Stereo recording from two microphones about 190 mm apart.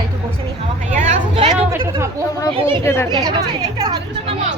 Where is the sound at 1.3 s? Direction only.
30° right (ahead or behind).